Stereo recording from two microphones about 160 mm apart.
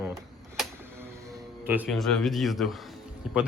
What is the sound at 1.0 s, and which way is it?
Music, 15° right (ahead or behind).